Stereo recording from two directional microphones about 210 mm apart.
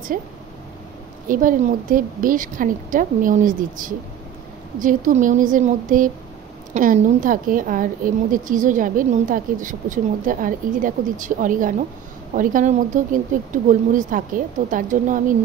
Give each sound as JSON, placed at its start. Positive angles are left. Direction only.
{"t": 0.1, "sound": "speech", "side_deg": -40}